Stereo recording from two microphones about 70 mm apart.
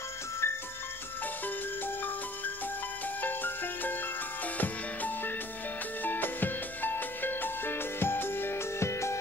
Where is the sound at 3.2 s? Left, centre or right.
Left.